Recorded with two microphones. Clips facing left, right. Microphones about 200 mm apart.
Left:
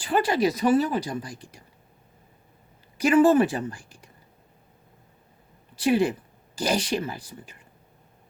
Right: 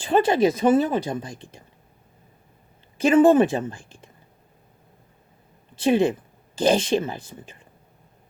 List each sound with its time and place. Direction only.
0.0 s speech: 25° right (ahead or behind)
3.0 s speech: 25° right (ahead or behind)
5.7 s speech: 25° right (ahead or behind)